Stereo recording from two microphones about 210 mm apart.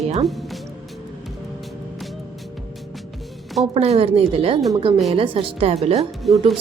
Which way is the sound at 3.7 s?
30° right (ahead or behind).